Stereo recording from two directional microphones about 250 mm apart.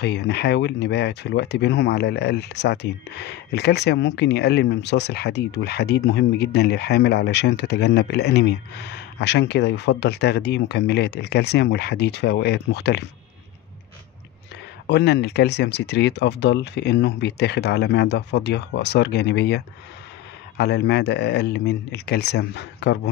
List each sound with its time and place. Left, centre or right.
0.0 s speech: left
14.9 s speech: left